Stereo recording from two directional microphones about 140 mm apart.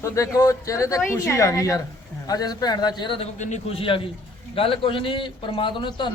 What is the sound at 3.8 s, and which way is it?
A man's voice, 40° left (ahead or behind).